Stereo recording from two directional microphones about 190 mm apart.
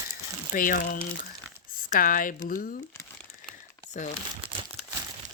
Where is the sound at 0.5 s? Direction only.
45° left (ahead or behind).